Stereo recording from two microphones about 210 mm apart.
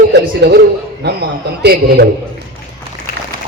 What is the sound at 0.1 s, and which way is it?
Speech, 55° right (ahead or behind).